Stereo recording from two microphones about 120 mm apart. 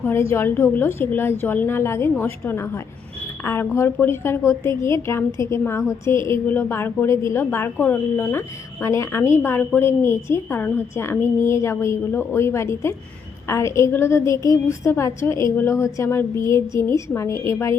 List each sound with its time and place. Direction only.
0.0 s a woman's voice: 20° left (ahead or behind)